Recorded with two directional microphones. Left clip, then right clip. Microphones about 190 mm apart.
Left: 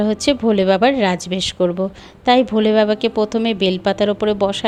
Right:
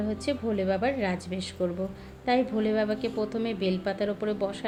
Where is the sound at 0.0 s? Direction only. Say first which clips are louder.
Left 13 dB; 45° left (ahead or behind).